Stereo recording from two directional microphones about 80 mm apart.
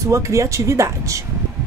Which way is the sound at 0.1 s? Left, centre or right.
Right.